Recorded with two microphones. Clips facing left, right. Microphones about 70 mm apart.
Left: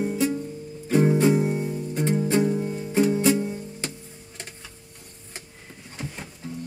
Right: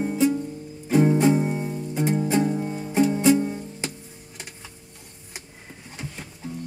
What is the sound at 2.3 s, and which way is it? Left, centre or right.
Music, centre.